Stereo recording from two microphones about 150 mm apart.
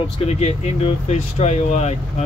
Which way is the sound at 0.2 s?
45° left (ahead or behind).